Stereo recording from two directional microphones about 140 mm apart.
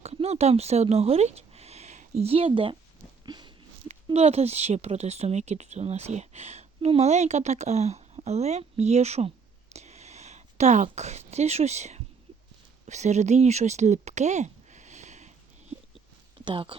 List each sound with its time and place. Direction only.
0.0 s speech: 50° right (ahead or behind)
3.2 s a sound: 30° right (ahead or behind)
3.8 s speech: 50° right (ahead or behind)
9.7 s a sound: 50° right (ahead or behind)
10.8 s speech: 55° right (ahead or behind)
16.4 s speech: 35° right (ahead or behind)